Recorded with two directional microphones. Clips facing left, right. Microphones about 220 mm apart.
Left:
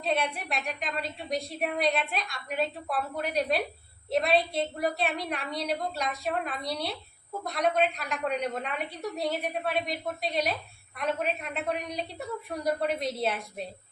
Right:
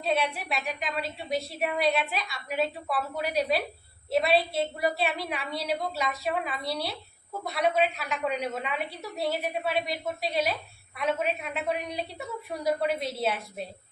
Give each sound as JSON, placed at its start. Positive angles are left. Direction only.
{"t": 0.0, "sound": "a woman's voice", "side_deg": -5}